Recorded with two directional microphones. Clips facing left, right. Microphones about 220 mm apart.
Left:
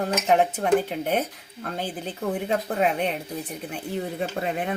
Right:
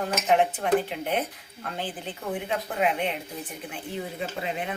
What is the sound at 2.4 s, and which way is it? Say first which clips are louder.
Speech: left 2 dB; 40° left (ahead or behind).